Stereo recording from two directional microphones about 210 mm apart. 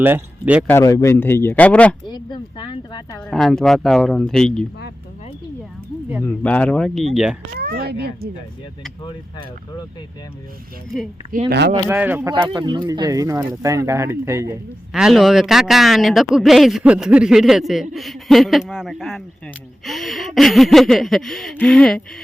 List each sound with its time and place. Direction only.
0.0 s speech: 10° right (ahead or behind)
0.7 s speech: 15° left (ahead or behind)
2.0 s speech: 20° left (ahead or behind)
3.2 s speech: 5° left (ahead or behind)
6.2 s speech: 5° left (ahead or behind)
7.6 s speech: 50° right (ahead or behind)
11.3 s speech: 45° right (ahead or behind)
11.9 s speech: 10° right (ahead or behind)
14.9 s speech: centre (ahead or behind)